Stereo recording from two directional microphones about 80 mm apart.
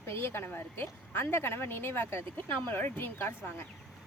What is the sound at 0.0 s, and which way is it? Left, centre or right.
A woman's voice, left.